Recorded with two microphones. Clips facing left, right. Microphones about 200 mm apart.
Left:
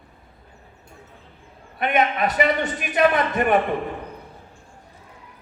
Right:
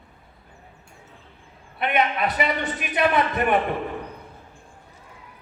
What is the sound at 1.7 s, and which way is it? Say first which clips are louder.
A man's voice: left 2 dB; 45° left (ahead or behind).